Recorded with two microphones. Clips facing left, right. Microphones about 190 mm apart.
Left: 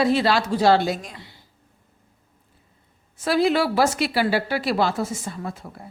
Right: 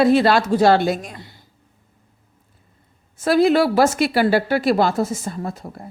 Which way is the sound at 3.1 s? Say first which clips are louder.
Right 5 dB; 45° right (ahead or behind).